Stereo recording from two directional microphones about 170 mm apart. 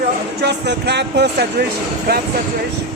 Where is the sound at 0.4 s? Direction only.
80° right.